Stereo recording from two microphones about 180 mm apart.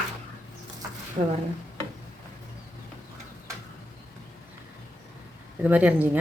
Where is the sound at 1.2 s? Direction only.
35° right (ahead or behind).